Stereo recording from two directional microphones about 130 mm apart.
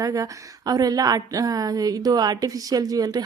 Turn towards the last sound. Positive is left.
turn(degrees=-30)  # may be behind; listen again after turning